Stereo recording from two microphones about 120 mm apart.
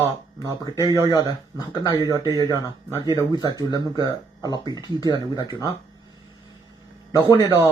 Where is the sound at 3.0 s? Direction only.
35° left (ahead or behind).